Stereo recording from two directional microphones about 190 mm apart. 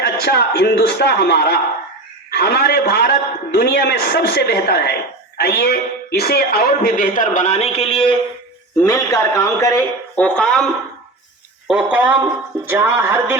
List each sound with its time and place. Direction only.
0.0 s a man's voice: 60° left (ahead or behind); by 8.1 s 30° left (ahead or behind)
8.9 s speech: 20° left (ahead or behind)
11.7 s speech: 5° right (ahead or behind)